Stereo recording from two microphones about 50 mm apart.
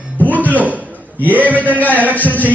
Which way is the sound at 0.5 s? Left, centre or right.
Right.